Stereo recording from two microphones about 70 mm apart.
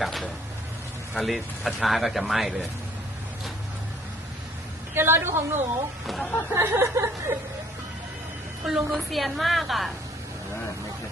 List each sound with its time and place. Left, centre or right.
0.0 s speech: centre
4.9 s speech: right
6.1 s speech: centre
6.5 s speech: right
8.7 s speech: centre